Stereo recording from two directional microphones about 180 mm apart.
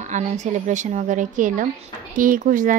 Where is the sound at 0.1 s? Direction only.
40° right (ahead or behind).